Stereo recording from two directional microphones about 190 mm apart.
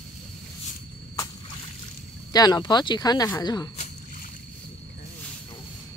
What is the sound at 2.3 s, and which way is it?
Speech, 20° left (ahead or behind).